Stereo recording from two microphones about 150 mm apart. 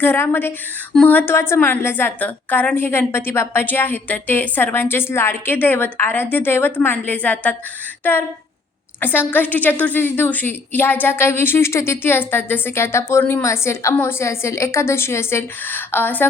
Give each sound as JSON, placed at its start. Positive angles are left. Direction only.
{"t": 0.0, "sound": "a woman's voice", "side_deg": 15}
{"t": 0.9, "sound": "speech", "side_deg": 0}
{"t": 1.3, "sound": "a woman's voice", "side_deg": 15}